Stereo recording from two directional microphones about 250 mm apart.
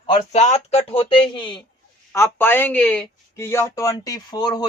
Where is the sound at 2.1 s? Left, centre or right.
Centre.